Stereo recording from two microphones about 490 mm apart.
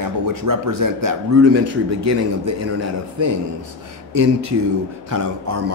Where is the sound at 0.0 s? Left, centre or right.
Right.